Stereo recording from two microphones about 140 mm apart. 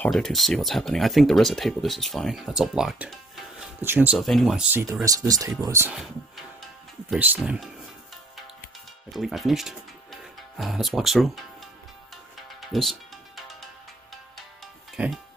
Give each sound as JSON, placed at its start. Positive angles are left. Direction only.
{"t": 0.1, "sound": "speech", "side_deg": 0}
{"t": 3.8, "sound": "speech", "side_deg": -15}
{"t": 4.2, "sound": "speech", "side_deg": 0}
{"t": 5.0, "sound": "speech", "side_deg": -25}
{"t": 7.2, "sound": "speech", "side_deg": -10}
{"t": 9.1, "sound": "speech", "side_deg": 0}
{"t": 12.4, "sound": "music", "side_deg": 0}
{"t": 14.1, "sound": "music", "side_deg": 0}